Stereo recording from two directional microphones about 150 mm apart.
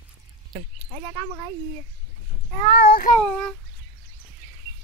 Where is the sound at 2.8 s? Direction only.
80° left.